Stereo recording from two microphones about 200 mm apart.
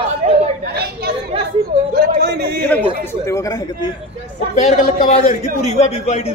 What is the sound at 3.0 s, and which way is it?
Speech, 15° left (ahead or behind).